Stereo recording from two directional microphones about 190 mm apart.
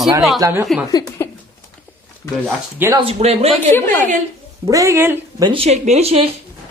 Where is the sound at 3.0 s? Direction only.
30° right (ahead or behind).